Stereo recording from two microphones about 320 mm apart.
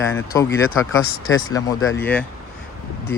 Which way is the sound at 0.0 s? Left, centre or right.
Centre.